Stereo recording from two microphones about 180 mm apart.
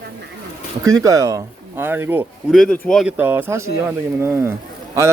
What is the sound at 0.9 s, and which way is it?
Speech, 20° right (ahead or behind).